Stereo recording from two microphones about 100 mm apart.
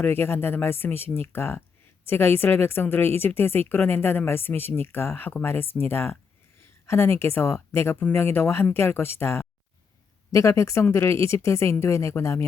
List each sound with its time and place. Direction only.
0.0 s a woman's voice: 20° left (ahead or behind)